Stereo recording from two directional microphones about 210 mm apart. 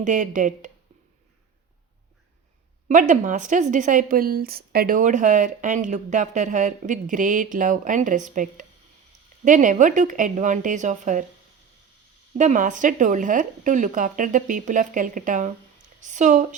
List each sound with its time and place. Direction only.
0.0 s a woman's voice: 35° right (ahead or behind)
2.9 s a woman's voice: 35° right (ahead or behind)
12.4 s a woman's voice: 35° right (ahead or behind)